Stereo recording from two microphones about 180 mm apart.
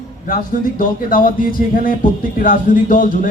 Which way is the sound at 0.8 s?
50° left (ahead or behind).